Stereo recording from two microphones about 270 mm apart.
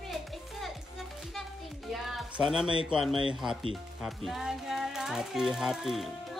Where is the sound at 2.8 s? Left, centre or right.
Centre.